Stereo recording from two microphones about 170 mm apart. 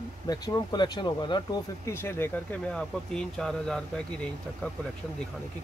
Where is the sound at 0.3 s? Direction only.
20° left (ahead or behind).